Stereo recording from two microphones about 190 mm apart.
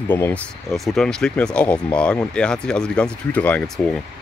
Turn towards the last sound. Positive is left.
turn(degrees=0)  # may be behind; listen again after turning